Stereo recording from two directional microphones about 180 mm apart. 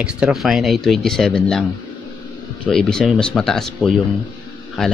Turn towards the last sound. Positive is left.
turn(degrees=0)  # may be behind; listen again after turning